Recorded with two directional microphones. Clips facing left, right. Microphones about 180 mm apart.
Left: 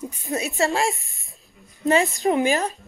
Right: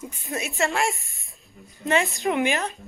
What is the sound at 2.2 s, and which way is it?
Speech, 30° left (ahead or behind).